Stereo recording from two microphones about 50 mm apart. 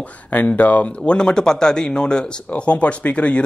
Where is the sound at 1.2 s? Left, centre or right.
Centre.